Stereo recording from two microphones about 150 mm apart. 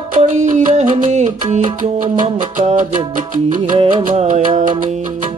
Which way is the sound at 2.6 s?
50° right (ahead or behind).